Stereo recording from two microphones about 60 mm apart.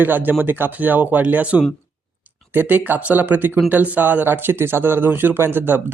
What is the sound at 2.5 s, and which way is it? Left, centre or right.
Speech, right.